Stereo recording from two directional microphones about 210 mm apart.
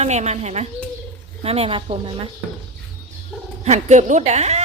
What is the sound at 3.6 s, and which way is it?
A woman's voice, 35° right (ahead or behind).